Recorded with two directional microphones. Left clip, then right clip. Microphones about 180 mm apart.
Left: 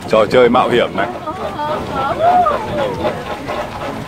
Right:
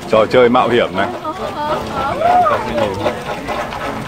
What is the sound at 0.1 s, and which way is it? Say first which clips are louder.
Speech: even; 15° left (ahead or behind).